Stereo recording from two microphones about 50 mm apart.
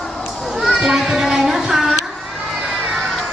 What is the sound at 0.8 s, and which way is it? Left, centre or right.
Music, centre.